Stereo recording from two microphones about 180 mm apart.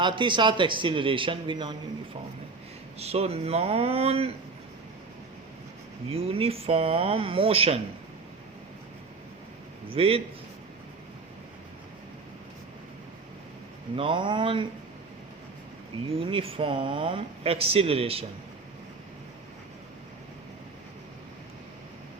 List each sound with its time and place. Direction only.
0.0 s a man's voice: 25° right (ahead or behind)
3.0 s speech: 35° right (ahead or behind)
6.1 s speech: 35° right (ahead or behind)
9.9 s speech: 30° right (ahead or behind)
13.9 s a man's voice: 30° right (ahead or behind)
16.0 s speech: 30° right (ahead or behind)